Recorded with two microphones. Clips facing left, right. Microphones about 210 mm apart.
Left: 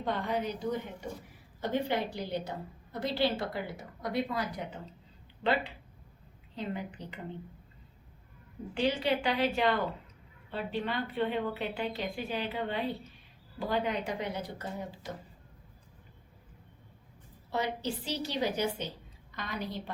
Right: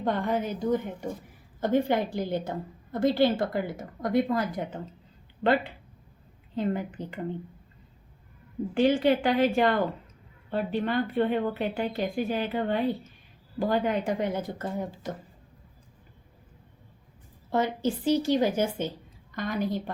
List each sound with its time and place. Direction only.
0.0 s a woman's voice: 50° right (ahead or behind)
8.7 s a woman's voice: 50° right (ahead or behind)
17.5 s a woman's voice: 50° right (ahead or behind)